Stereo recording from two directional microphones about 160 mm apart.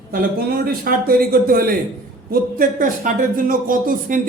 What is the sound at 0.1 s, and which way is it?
Speech, 65° right (ahead or behind).